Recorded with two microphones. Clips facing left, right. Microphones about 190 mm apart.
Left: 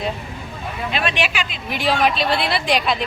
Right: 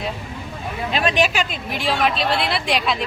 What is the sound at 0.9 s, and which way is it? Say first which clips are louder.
Speech: right 4 dB; 40° right (ahead or behind).